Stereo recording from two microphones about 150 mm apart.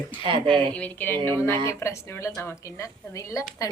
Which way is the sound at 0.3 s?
35° right (ahead or behind).